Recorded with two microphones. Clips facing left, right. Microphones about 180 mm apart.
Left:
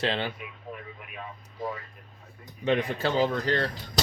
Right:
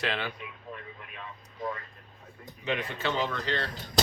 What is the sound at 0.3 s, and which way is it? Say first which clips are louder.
Speech: left 2 dB; 10° left (ahead or behind).